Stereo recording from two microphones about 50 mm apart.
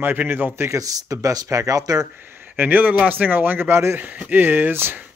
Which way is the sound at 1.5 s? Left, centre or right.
Right.